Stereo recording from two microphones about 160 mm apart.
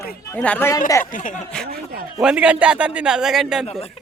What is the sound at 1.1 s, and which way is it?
Speech, 55° left (ahead or behind).